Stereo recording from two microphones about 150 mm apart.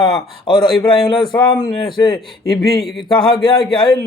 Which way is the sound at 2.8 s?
Centre (ahead or behind).